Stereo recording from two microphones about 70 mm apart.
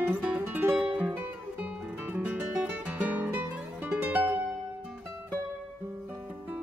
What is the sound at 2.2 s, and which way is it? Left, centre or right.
Music, centre.